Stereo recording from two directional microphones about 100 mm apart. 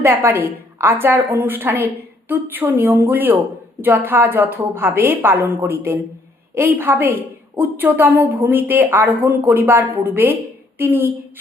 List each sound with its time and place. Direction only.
0.0 s a woman's voice: 25° right (ahead or behind)